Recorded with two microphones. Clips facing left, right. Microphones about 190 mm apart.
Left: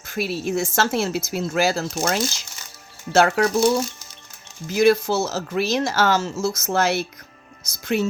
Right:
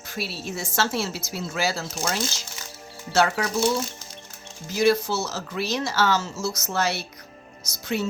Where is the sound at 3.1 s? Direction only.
50° left (ahead or behind).